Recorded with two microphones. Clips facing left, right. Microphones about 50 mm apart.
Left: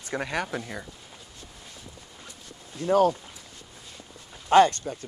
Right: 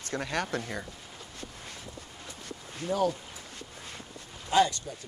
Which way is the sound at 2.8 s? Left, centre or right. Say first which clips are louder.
Left 7 dB; left.